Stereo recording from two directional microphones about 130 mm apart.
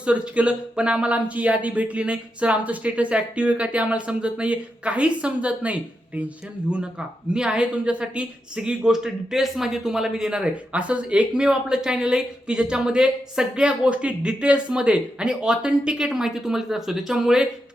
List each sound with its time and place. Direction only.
0.0 s speech: 10° right (ahead or behind)
7.3 s speech: 5° right (ahead or behind)